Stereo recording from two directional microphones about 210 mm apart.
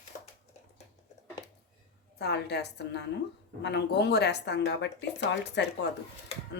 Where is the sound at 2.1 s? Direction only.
50° left (ahead or behind).